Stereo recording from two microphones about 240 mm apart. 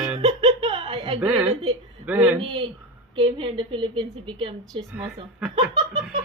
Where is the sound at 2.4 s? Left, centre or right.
Right.